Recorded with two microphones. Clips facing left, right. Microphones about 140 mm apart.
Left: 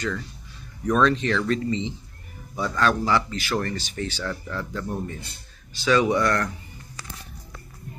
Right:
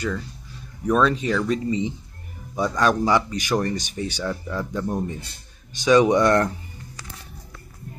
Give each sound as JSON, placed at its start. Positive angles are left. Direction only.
{"t": 0.8, "sound": "speech", "side_deg": -10}